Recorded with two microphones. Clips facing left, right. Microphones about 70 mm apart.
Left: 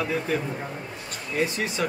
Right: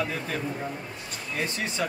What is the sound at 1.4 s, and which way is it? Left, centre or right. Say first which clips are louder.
Speech: left 3 dB; centre.